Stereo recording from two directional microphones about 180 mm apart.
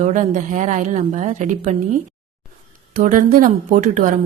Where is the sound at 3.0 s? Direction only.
50° right (ahead or behind).